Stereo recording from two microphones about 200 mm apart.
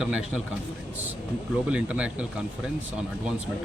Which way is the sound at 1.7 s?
5° right (ahead or behind).